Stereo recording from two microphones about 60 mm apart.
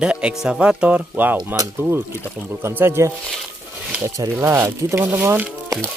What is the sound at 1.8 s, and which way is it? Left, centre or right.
Speech, right.